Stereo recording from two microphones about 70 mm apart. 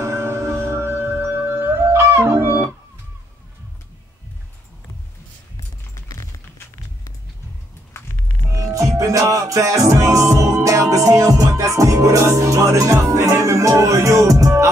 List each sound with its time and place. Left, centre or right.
0.0 s music: right
8.5 s music: right